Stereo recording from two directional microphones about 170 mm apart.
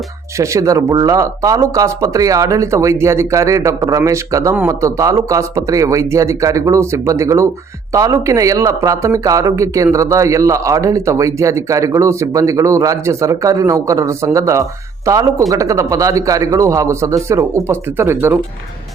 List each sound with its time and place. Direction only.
0.3 s speech: 20° right (ahead or behind)